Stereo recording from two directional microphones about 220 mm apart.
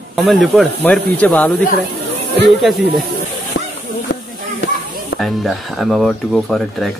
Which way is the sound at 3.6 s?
55° left (ahead or behind).